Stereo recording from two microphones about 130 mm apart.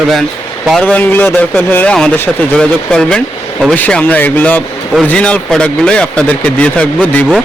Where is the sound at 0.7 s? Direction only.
10° left (ahead or behind).